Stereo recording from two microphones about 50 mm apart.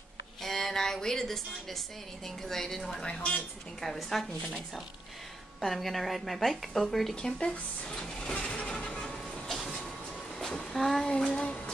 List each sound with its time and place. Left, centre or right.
0.4 s a woman's voice: centre
3.1 s a woman's voice: left
3.8 s a woman's voice: centre
7.2 s speech: centre
9.5 s train: centre
10.5 s a sound: centre